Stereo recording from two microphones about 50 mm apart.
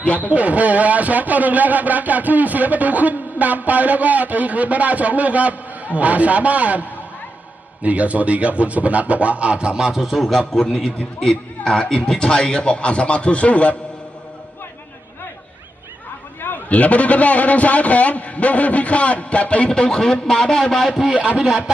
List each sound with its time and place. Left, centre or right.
0.0 s speech: left
0.3 s a man's voice: right; by 13.7 s left
16.6 s a man's voice: left; by 21.0 s centre
21.0 s speech: centre